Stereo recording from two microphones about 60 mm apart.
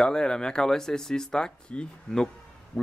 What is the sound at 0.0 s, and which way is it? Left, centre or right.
Speech, centre.